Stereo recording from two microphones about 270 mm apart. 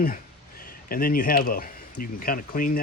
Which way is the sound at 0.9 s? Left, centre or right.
Left.